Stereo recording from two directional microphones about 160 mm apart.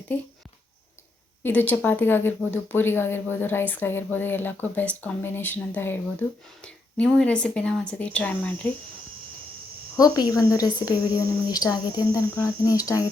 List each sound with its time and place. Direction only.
1.5 s speech: 10° left (ahead or behind)
10.0 s a woman's voice: 25° left (ahead or behind)